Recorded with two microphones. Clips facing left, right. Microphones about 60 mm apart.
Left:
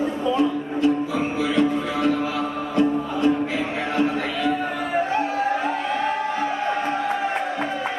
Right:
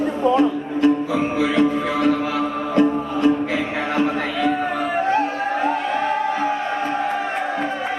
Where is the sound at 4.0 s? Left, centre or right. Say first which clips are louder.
Right 1 dB; right.